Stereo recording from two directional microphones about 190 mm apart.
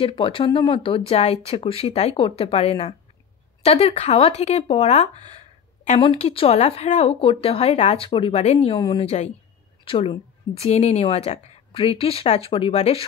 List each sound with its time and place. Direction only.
0.0 s a woman's voice: 25° left (ahead or behind)